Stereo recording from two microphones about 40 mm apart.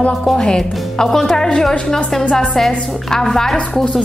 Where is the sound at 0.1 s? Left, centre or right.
Centre.